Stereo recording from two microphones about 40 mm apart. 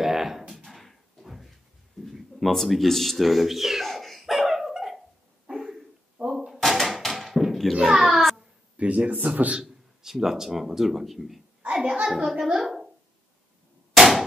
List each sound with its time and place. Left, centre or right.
0.0 s a sound: centre
5.5 s dog: centre
6.2 s door: centre
6.6 s a sound: centre
8.7 s a man's voice: right
10.0 s speech: centre
11.8 s a child's voice: right
12.5 s a sound: centre
13.9 s hammer: centre